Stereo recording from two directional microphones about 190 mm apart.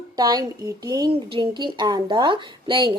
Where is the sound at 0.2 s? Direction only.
20° right (ahead or behind).